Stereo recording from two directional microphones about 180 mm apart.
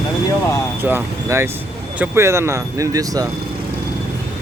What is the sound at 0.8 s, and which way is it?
Speech, 15° right (ahead or behind).